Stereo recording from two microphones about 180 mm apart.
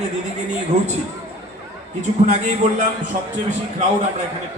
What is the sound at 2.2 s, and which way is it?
Speech, 40° right (ahead or behind).